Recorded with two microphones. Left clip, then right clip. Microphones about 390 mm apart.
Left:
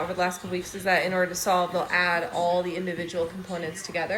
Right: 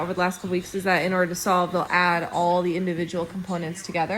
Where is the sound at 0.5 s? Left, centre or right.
Right.